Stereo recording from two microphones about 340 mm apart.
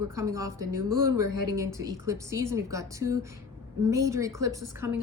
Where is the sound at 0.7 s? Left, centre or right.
Right.